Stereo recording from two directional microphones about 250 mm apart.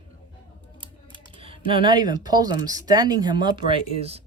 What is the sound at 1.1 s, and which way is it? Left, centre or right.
Typing, right.